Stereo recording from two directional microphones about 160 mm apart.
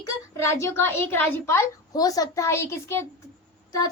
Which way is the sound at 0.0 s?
15° left (ahead or behind).